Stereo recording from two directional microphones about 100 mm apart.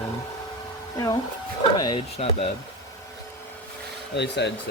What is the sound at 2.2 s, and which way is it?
Speech, 90° left.